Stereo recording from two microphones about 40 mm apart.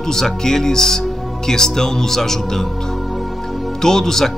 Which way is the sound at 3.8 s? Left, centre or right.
Centre.